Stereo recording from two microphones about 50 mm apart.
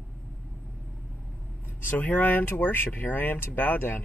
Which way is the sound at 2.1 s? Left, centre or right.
Left.